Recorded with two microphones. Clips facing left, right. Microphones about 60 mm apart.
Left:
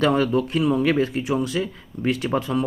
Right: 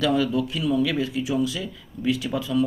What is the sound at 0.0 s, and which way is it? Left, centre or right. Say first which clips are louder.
Speech: left 3 dB; left.